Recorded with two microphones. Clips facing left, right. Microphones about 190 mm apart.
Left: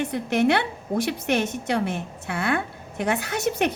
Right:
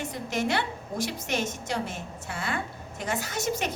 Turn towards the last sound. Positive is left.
turn(degrees=60)  # may be behind; listen again after turning